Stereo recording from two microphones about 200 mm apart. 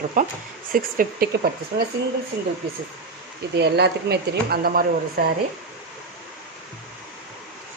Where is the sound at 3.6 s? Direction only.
55° right (ahead or behind).